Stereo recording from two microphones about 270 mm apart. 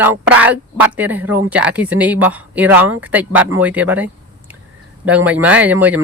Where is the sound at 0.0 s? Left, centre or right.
Centre.